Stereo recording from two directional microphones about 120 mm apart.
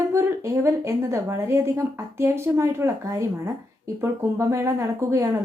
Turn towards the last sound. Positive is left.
turn(degrees=-25)  # may be behind; listen again after turning